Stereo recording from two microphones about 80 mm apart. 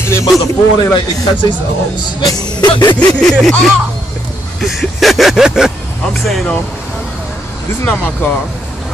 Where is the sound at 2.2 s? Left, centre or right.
Left.